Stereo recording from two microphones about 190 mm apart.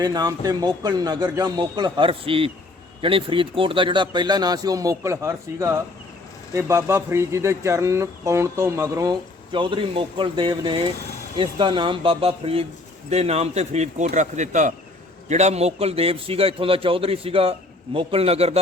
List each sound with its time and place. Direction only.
0.0 s a man's voice: 20° right (ahead or behind)